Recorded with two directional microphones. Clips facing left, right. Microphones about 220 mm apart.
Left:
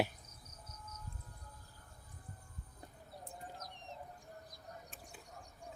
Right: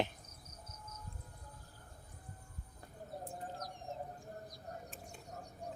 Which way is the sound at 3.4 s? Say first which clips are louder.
Right 5 dB; 50° right (ahead or behind).